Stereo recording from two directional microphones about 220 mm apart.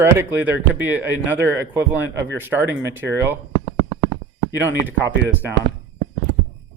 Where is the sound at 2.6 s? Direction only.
55° right (ahead or behind).